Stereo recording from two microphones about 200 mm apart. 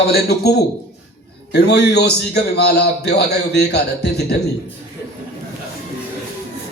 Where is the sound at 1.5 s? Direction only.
55° left (ahead or behind).